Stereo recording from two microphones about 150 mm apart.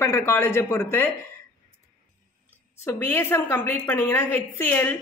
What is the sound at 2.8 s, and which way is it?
A woman's voice, 15° left (ahead or behind).